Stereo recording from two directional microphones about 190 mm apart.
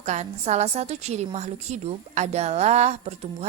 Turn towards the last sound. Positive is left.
turn(degrees=-35)  # may be behind; listen again after turning